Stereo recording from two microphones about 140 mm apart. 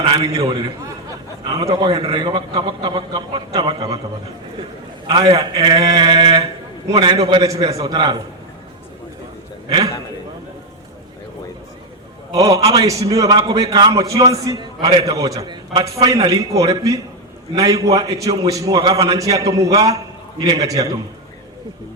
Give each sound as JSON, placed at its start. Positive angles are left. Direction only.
{"t": 0.1, "sound": "a man's voice", "side_deg": -25}
{"t": 5.0, "sound": "a man's voice", "side_deg": -30}
{"t": 9.6, "sound": "a man's voice", "side_deg": -30}
{"t": 12.3, "sound": "a man's voice", "side_deg": -25}